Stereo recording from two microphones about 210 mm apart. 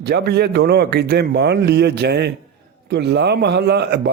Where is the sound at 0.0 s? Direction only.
50° right (ahead or behind).